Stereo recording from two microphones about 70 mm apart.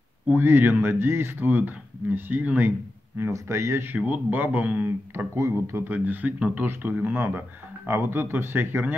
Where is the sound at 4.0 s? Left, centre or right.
Right.